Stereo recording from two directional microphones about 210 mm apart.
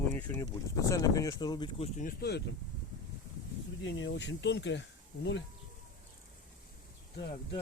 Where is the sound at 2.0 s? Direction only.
45° left (ahead or behind).